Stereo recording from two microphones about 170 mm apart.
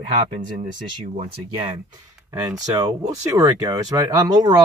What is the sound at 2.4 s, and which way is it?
Speech, 20° right (ahead or behind).